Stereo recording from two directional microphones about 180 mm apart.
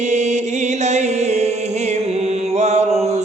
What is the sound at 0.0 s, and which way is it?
Chant, 40° right (ahead or behind).